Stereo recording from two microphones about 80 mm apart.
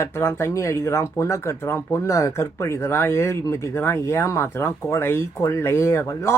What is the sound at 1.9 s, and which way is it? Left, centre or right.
Speech, left.